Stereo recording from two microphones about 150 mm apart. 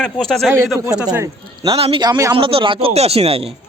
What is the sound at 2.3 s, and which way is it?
Speech, 35° right (ahead or behind).